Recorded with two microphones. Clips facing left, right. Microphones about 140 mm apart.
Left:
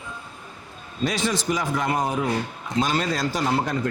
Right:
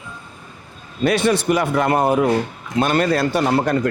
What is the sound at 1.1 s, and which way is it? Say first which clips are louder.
A man's voice: right 8 dB; 60° right (ahead or behind).